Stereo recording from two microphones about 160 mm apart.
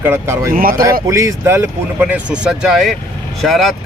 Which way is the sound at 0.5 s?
65° right (ahead or behind).